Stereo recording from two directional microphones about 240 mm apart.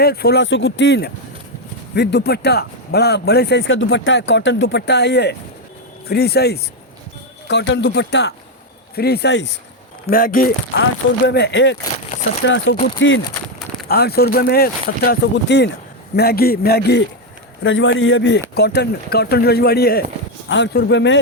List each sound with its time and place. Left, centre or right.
0.0 s speech: left